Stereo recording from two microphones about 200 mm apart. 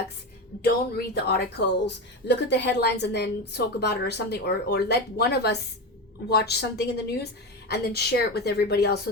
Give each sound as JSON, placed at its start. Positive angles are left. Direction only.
{"t": 0.6, "sound": "a woman's voice", "side_deg": 55}